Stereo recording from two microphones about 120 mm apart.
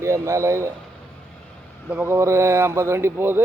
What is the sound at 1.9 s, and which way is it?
Speech, 20° right (ahead or behind).